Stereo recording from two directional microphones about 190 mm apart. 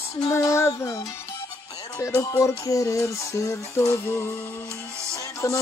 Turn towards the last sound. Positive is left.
turn(degrees=15)  # may be behind; listen again after turning